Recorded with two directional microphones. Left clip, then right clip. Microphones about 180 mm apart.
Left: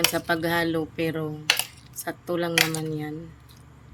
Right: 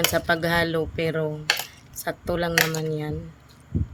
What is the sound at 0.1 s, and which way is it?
Speech, 35° right (ahead or behind).